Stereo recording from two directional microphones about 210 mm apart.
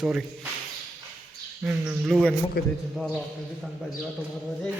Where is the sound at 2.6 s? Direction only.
45° left (ahead or behind).